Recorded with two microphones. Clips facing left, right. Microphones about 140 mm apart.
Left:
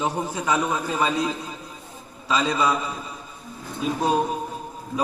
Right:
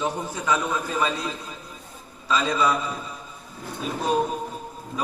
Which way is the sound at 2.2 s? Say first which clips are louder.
Even; 15° left (ahead or behind).